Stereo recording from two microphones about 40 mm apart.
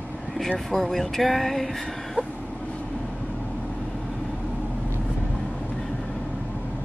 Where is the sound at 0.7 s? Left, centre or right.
Centre.